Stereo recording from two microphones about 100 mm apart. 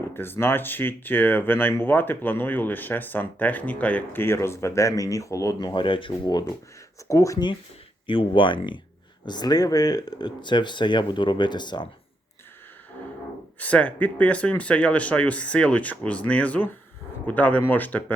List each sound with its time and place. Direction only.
0.1 s speech: 20° left (ahead or behind)
5.5 s speech: 50° left (ahead or behind)
7.1 s speech: 35° left (ahead or behind)
8.0 s speech: 55° left (ahead or behind)
13.6 s speech: 15° left (ahead or behind)